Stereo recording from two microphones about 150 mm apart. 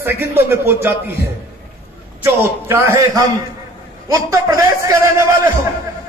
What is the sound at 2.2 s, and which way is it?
A man's voice, 15° right (ahead or behind).